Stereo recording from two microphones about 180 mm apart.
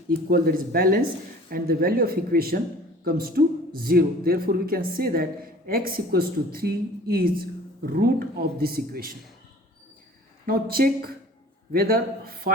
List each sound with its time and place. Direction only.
0.1 s speech: 55° right (ahead or behind)
10.4 s speech: 55° right (ahead or behind)